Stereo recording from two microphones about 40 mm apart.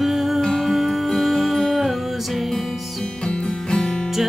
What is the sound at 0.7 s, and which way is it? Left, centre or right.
Music, centre.